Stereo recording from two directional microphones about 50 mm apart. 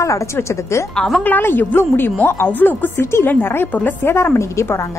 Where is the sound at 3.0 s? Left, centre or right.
Left.